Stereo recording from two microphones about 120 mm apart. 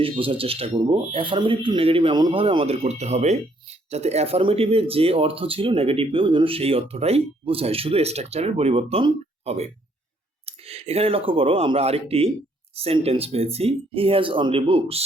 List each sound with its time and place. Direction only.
0.0 s speech: 50° right (ahead or behind)